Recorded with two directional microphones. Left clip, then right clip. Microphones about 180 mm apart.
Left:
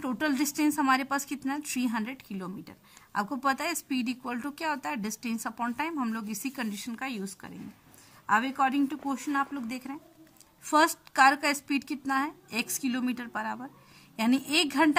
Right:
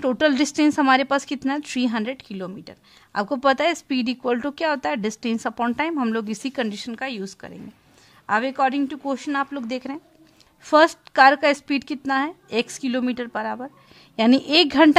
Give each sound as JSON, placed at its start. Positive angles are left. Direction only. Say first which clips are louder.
{"t": 0.0, "sound": "a woman's voice", "louder": "right 10 dB", "side_deg": -45}